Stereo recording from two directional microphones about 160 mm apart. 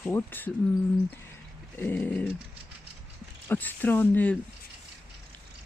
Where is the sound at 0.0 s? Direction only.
10° left (ahead or behind).